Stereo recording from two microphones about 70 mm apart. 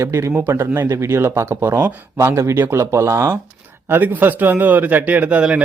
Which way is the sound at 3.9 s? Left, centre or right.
Right.